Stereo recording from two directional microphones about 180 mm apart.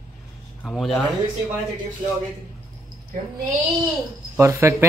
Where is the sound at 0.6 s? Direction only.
5° left (ahead or behind).